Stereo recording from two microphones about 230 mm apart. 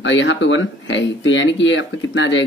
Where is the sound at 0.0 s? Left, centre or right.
Left.